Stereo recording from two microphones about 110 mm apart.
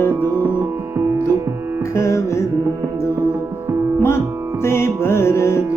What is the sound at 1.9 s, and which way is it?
Music, 25° left (ahead or behind).